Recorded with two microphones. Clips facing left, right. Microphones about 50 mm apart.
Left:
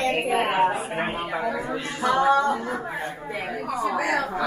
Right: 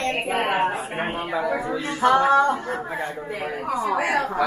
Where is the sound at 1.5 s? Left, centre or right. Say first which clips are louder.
Right 3 dB; right.